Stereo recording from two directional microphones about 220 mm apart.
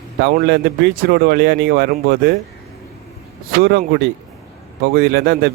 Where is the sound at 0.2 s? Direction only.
50° right (ahead or behind).